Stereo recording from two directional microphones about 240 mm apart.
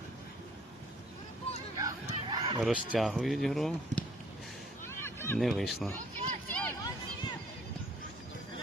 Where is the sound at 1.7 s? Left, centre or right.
Centre.